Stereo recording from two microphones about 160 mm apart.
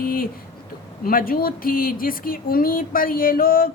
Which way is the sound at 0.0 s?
65° left (ahead or behind).